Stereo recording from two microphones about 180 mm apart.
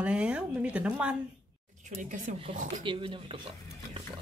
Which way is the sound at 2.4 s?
45° right (ahead or behind).